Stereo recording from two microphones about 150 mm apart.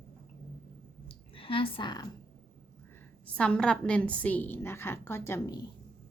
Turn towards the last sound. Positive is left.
turn(degrees=15)  # may be behind; listen again after turning